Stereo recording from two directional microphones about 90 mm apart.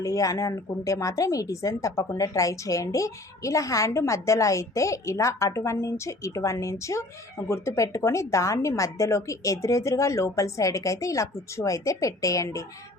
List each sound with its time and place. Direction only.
0.0 s a woman's voice: 40° left (ahead or behind)